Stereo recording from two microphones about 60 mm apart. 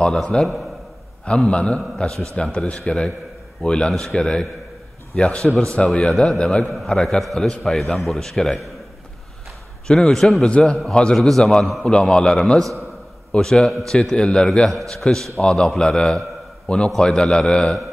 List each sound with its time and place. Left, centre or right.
0.0 s a man's voice: centre
6.6 s a man's voice: centre
9.8 s a man's voice: centre
14.7 s a man's voice: centre